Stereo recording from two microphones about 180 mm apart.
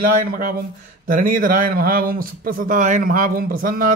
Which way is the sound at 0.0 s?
55° right (ahead or behind).